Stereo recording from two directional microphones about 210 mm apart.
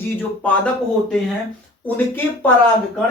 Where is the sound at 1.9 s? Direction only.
10° left (ahead or behind).